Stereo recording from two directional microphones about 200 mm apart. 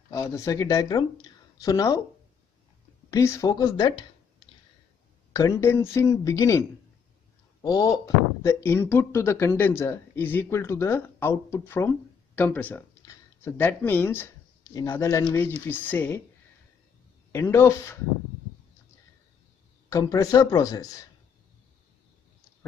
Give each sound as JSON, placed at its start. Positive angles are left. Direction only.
{"t": 0.1, "sound": "speech", "side_deg": 15}
{"t": 3.1, "sound": "speech", "side_deg": 15}
{"t": 5.3, "sound": "speech", "side_deg": 15}
{"t": 7.6, "sound": "speech", "side_deg": 20}
{"t": 17.3, "sound": "speech", "side_deg": 10}
{"t": 19.9, "sound": "speech", "side_deg": 15}